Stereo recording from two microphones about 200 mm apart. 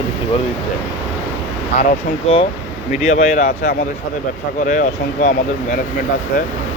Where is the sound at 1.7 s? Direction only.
30° left (ahead or behind).